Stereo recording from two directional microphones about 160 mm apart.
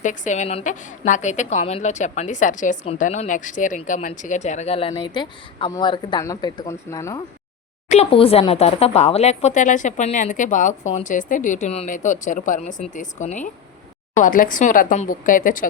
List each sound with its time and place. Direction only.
0.0 s a woman's voice: 50° left (ahead or behind); by 7.2 s 20° left (ahead or behind)
7.9 s a woman's voice: 40° left (ahead or behind)
14.2 s speech: 60° left (ahead or behind)